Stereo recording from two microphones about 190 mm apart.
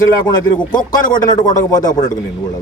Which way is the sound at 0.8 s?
45° left (ahead or behind).